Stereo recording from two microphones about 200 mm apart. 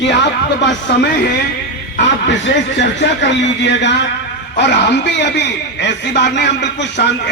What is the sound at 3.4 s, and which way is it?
A man's voice, 60° left (ahead or behind).